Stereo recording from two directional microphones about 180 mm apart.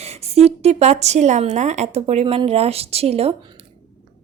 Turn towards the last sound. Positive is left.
turn(degrees=-35)  # may be behind; listen again after turning